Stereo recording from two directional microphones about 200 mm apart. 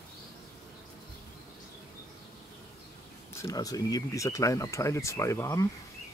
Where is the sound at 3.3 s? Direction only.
15° left (ahead or behind).